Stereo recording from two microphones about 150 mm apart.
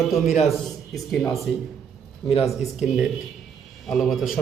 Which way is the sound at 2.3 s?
45° left (ahead or behind).